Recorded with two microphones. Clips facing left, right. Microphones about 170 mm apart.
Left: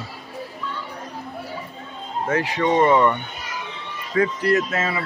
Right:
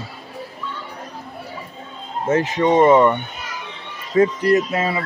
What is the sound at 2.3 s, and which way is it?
Speech, 25° right (ahead or behind).